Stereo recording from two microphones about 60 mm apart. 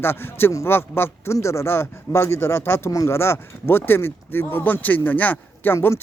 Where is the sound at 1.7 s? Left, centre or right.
Left.